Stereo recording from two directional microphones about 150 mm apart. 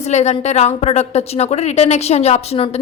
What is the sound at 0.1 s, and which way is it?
A woman's voice, 50° left (ahead or behind).